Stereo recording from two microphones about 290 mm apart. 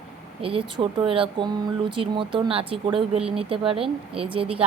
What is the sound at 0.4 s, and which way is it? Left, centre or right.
A woman's voice, centre.